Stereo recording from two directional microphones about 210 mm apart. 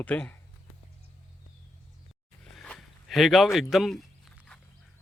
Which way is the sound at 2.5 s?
Centre (ahead or behind).